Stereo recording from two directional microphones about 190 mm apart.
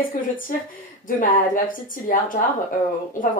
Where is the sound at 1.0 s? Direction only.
45° left (ahead or behind).